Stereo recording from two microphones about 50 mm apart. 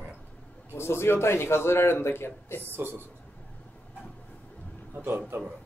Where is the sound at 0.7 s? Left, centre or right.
Left.